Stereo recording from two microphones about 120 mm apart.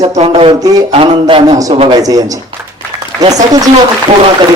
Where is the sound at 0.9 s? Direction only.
50° right (ahead or behind).